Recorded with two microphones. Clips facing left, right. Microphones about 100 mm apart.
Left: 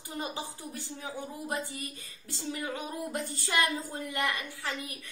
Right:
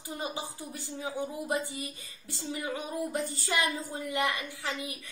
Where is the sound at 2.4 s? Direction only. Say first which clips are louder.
Right 1 dB; centre (ahead or behind).